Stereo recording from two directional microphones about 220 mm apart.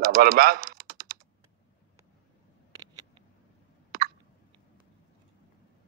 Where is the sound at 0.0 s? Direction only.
40° right (ahead or behind).